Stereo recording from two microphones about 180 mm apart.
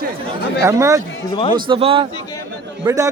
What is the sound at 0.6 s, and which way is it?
A man's voice, 15° right (ahead or behind).